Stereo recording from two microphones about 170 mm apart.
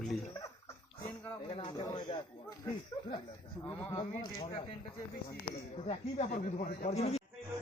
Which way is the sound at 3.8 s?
15° left (ahead or behind).